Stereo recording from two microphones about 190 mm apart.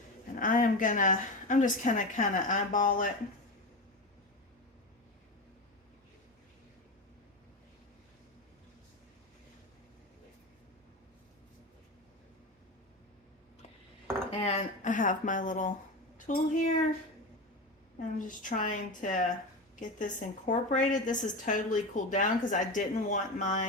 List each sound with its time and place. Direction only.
0.3 s a woman's voice: 45° left (ahead or behind)
14.3 s a woman's voice: 30° left (ahead or behind)
18.2 s a woman's voice: 45° left (ahead or behind)